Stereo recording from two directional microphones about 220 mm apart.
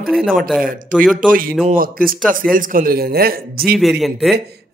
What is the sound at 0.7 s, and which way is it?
Speech, 35° right (ahead or behind).